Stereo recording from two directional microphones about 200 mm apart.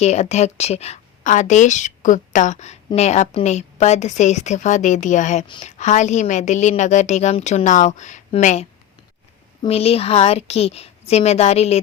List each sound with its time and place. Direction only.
0.0 s speech: 35° left (ahead or behind)